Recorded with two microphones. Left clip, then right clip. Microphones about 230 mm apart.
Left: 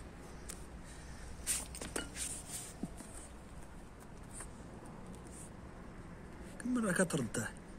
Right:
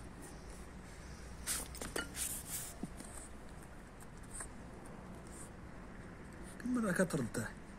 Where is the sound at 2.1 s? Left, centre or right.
Right.